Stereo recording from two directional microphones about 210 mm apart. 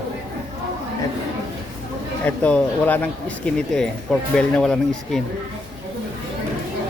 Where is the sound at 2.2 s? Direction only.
5° left (ahead or behind).